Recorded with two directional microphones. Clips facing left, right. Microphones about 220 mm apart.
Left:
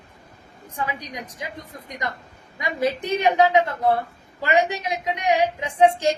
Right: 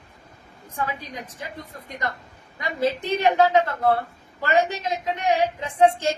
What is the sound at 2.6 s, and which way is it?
Speech, 15° left (ahead or behind).